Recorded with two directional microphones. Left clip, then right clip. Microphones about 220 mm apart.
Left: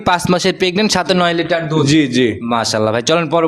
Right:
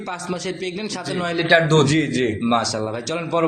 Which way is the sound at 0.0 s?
45° left (ahead or behind).